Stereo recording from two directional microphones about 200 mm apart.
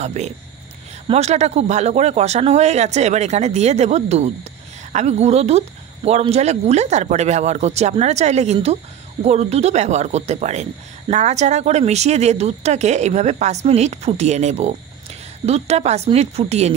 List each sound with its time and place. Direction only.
0.0 s speech: 35° right (ahead or behind)